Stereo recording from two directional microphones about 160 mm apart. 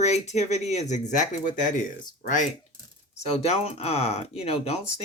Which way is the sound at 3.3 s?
40° left (ahead or behind).